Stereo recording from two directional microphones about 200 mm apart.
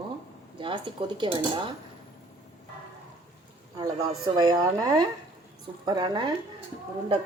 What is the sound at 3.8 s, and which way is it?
A woman's voice, 20° right (ahead or behind).